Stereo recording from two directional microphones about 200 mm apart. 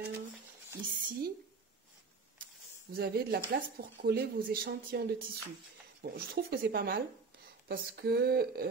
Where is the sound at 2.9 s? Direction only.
50° right (ahead or behind).